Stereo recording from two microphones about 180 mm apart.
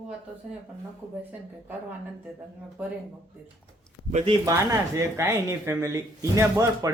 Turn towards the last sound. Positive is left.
turn(degrees=-15)  # may be behind; listen again after turning